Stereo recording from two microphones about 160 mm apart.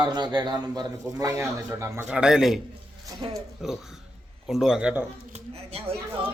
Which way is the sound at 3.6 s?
5° right (ahead or behind).